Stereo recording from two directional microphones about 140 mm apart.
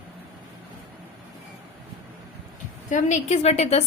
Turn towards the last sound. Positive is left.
turn(degrees=50)  # may be behind; listen again after turning